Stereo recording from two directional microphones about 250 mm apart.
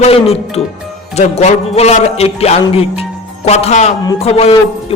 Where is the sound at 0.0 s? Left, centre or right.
Left.